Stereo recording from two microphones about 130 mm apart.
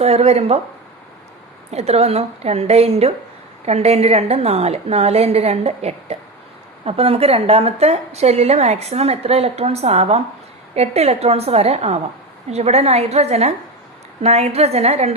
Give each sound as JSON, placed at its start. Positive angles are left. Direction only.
{"t": 0.0, "sound": "a woman's voice", "side_deg": -55}
{"t": 1.7, "sound": "a woman's voice", "side_deg": -55}